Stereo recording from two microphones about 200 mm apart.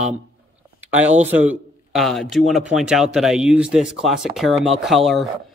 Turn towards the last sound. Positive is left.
turn(degrees=0)  # may be behind; listen again after turning